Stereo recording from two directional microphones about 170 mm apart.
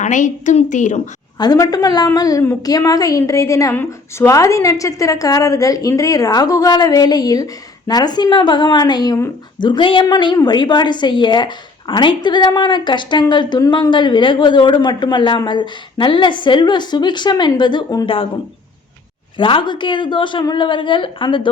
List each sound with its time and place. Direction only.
0.0 s a woman's voice: 45° left (ahead or behind)
1.4 s a woman's voice: 20° left (ahead or behind)
19.4 s a woman's voice: 30° left (ahead or behind)